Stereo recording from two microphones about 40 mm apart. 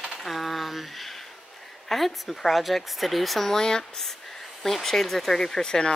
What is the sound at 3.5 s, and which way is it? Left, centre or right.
Speech, centre.